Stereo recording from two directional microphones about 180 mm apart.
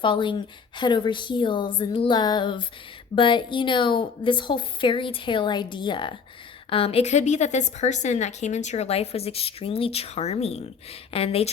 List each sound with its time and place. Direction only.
0.0 s a woman's voice: 25° left (ahead or behind)